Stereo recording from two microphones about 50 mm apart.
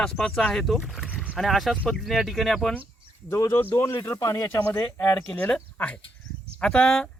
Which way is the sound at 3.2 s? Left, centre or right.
Left.